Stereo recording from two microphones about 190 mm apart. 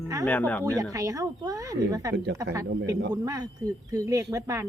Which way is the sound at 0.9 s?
15° right (ahead or behind).